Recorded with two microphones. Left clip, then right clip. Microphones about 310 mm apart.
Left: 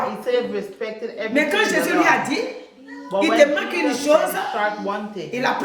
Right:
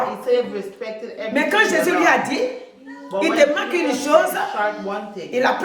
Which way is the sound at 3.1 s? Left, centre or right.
Left.